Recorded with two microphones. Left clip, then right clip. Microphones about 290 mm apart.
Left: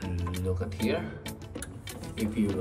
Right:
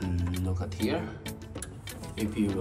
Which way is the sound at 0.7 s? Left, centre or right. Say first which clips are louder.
Right 3 dB; centre.